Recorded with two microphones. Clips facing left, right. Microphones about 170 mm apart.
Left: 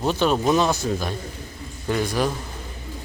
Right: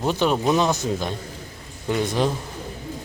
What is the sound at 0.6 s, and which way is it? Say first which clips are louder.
Speech: even; 20° right (ahead or behind).